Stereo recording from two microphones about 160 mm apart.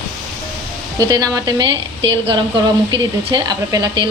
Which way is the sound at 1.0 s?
25° right (ahead or behind).